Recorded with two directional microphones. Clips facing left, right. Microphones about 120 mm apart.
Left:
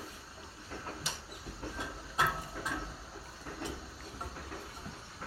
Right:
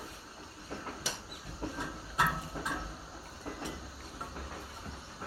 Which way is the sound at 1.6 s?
30° right (ahead or behind).